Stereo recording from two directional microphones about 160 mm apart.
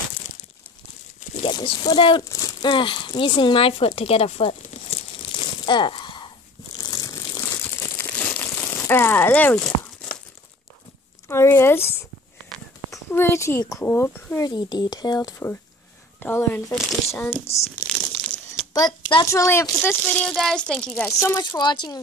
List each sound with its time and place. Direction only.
1.3 s speech: 30° left (ahead or behind)
2.2 s a sound: 25° left (ahead or behind)
6.8 s crumpling: 20° left (ahead or behind)
8.0 s crumpling: 10° left (ahead or behind)
11.2 s speech: 15° left (ahead or behind)
12.9 s speech: 15° left (ahead or behind)
14.4 s speech: 25° left (ahead or behind)
17.1 s crumpling: 15° left (ahead or behind)
18.7 s a child's voice: 25° left (ahead or behind); by 21.0 s centre (ahead or behind)
21.0 s speech: 15° left (ahead or behind)
21.4 s speech: 25° left (ahead or behind)